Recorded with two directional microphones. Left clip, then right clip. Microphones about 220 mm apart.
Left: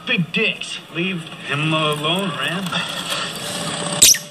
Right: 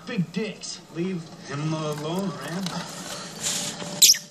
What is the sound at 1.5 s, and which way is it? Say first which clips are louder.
Speech: left 11 dB; 15° left (ahead or behind).